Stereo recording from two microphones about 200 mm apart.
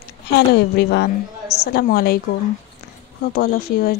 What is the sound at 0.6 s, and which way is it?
A woman's voice, 55° left (ahead or behind).